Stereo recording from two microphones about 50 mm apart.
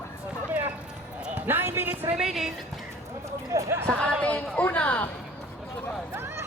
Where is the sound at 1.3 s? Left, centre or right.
Right.